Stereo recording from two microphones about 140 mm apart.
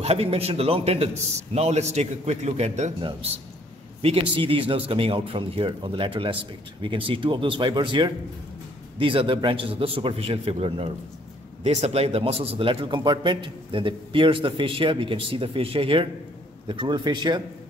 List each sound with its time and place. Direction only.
0.0 s a man's voice: 45° right (ahead or behind)
3.0 s a man's voice: 40° right (ahead or behind)